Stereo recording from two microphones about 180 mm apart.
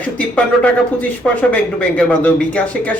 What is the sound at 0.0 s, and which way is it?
Speech, 10° left (ahead or behind).